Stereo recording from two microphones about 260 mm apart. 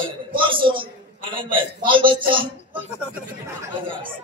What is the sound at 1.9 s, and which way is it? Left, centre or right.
Speech, centre.